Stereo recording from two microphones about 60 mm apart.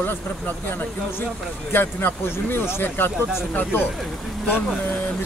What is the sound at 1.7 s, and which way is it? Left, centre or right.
Speech, left.